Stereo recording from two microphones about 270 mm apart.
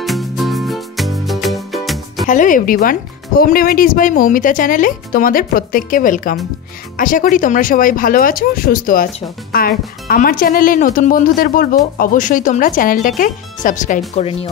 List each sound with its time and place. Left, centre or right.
0.0 s music: centre
2.2 s speech: left